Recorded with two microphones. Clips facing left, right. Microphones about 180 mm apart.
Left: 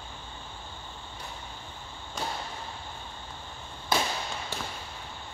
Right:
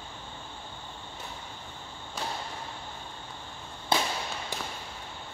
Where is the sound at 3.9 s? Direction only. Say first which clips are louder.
Even; 30° right (ahead or behind).